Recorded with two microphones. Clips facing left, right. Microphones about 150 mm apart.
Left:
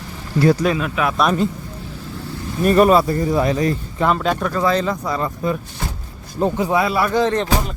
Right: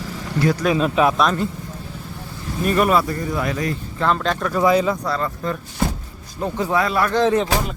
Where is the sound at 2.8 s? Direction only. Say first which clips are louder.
Left 5 dB; 30° left (ahead or behind).